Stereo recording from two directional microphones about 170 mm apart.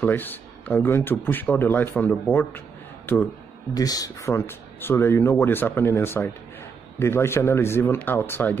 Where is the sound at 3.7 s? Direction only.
20° left (ahead or behind).